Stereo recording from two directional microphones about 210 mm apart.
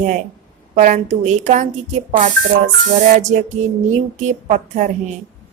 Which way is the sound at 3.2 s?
35° right (ahead or behind).